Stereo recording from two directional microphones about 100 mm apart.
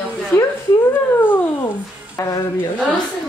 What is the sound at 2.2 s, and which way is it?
Speech, 35° left (ahead or behind).